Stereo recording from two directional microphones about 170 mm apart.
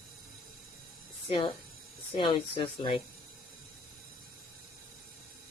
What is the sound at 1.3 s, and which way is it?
Speech, 30° left (ahead or behind).